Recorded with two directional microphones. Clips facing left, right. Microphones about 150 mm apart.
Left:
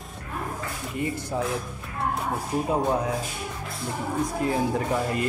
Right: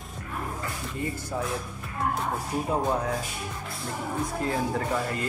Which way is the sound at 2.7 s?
15° left (ahead or behind).